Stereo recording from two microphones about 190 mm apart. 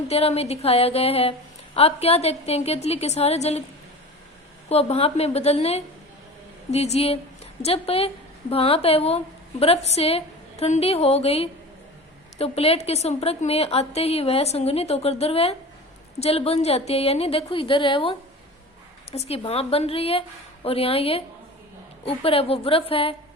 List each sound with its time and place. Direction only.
0.1 s a woman's voice: 35° left (ahead or behind)
4.7 s a woman's voice: 35° left (ahead or behind)